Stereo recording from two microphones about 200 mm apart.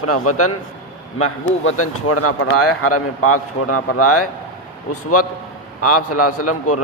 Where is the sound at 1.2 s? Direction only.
90° left.